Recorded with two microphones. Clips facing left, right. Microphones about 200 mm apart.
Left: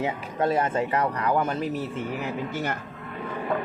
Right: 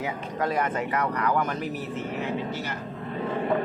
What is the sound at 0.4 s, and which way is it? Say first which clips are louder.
Speech: left 3 dB; 25° left (ahead or behind).